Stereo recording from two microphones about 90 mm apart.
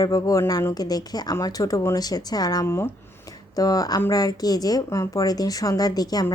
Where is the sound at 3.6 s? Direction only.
45° left (ahead or behind).